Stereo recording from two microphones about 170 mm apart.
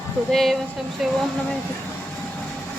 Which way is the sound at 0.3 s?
Centre (ahead or behind).